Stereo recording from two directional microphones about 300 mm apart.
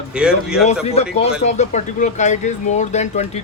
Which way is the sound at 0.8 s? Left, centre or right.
Left.